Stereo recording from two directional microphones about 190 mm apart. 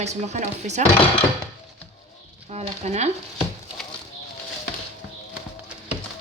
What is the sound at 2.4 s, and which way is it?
Speech, 35° right (ahead or behind).